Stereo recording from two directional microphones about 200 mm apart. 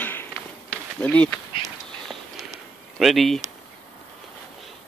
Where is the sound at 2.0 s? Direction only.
Centre (ahead or behind).